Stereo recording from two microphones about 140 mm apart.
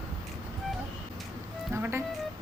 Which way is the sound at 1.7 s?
20° right (ahead or behind).